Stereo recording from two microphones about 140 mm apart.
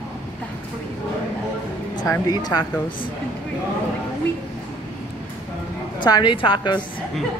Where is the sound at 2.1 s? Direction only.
30° left (ahead or behind).